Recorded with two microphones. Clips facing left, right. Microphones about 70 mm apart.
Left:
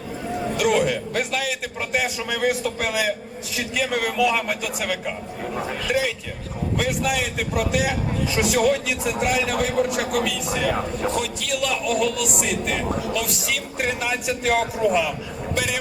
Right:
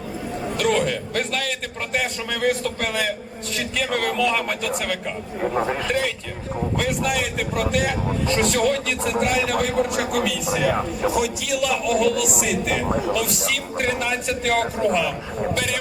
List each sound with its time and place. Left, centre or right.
0.5 s a man's voice: centre
5.4 s a man's voice: right
6.7 s a man's voice: centre
15.5 s vehicle: centre